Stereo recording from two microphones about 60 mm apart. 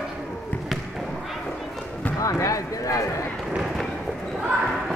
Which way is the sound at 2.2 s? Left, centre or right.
Left.